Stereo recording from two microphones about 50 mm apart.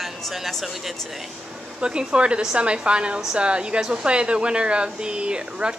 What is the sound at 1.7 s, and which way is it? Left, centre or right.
A woman's voice, centre.